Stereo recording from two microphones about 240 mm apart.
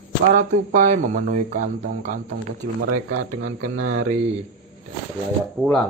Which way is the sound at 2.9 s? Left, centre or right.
Right.